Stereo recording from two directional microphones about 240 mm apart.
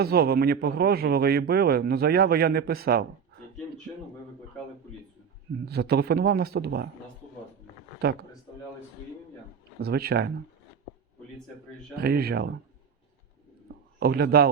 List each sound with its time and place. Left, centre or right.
0.0 s a man's voice: right
5.6 s a man's voice: right
9.8 s a man's voice: right
11.9 s a man's voice: right
14.0 s a man's voice: right